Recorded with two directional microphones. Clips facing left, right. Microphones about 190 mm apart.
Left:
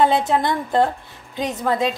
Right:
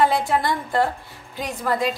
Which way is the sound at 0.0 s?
20° left (ahead or behind).